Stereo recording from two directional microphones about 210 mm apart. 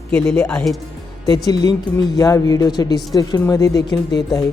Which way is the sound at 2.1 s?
15° left (ahead or behind).